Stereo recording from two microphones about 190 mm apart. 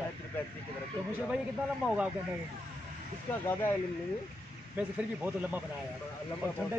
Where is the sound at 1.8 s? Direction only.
5° right (ahead or behind).